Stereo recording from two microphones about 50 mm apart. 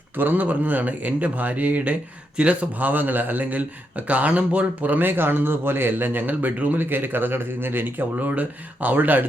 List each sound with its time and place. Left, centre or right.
0.2 s speech: right